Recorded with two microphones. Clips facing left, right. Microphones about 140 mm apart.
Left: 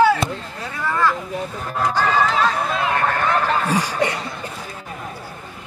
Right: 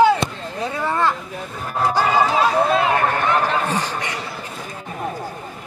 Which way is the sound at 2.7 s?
25° right (ahead or behind).